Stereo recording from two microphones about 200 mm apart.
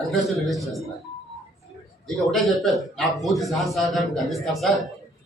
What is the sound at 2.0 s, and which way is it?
A man's voice, centre (ahead or behind).